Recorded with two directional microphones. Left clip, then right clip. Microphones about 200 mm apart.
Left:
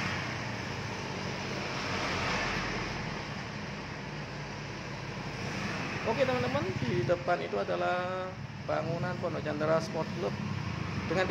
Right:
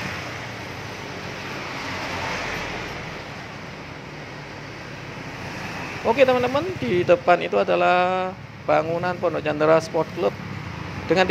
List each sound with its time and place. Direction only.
6.1 s speech: 40° right (ahead or behind)